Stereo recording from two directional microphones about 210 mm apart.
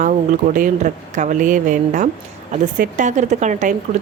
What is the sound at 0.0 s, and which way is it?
Speech, 40° right (ahead or behind).